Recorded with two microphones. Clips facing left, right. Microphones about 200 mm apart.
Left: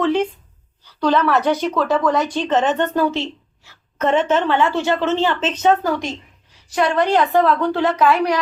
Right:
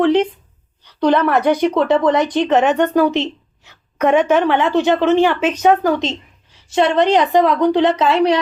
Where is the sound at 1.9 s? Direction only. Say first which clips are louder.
Right 4 dB; 20° right (ahead or behind).